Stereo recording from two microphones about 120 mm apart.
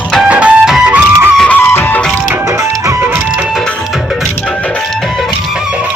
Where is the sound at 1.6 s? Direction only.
20° left (ahead or behind).